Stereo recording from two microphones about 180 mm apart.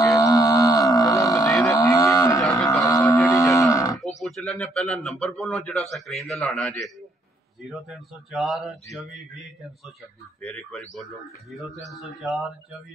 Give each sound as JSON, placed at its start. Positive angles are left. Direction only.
{"t": 0.1, "sound": "a sound", "side_deg": 20}
{"t": 1.7, "sound": "livestock", "side_deg": 20}
{"t": 4.2, "sound": "a man's voice", "side_deg": 5}
{"t": 10.4, "sound": "a man's voice", "side_deg": 5}